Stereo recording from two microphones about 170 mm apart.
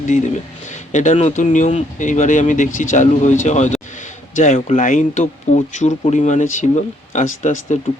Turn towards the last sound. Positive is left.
turn(degrees=50)  # may be behind; listen again after turning